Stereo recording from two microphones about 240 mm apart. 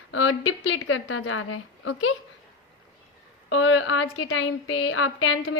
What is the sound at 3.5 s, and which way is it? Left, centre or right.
A woman's voice, left.